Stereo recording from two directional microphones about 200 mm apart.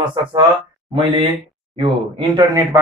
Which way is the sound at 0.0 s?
25° right (ahead or behind).